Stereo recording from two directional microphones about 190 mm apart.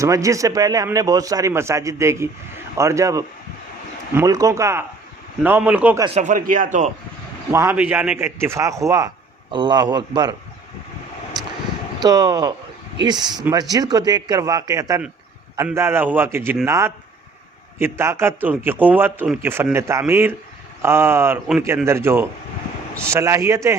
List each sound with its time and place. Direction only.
0.0 s a man's voice: 15° right (ahead or behind)
6.1 s speech: 45° right (ahead or behind)
7.5 s a man's voice: 15° right (ahead or behind)
12.0 s a man's voice: 20° right (ahead or behind)